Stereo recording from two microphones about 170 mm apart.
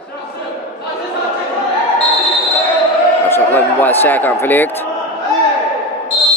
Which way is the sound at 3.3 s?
10° left (ahead or behind).